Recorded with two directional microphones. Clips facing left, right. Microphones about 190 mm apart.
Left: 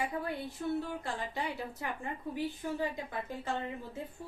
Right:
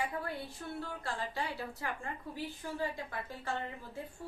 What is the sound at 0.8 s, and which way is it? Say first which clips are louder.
A woman's voice: left 3 dB; 20° left (ahead or behind).